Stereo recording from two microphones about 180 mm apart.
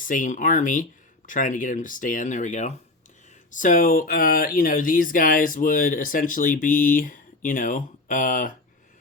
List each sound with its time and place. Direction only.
0.0 s speech: 45° left (ahead or behind)